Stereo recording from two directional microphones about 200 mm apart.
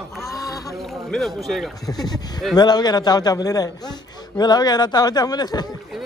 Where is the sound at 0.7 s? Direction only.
Centre (ahead or behind).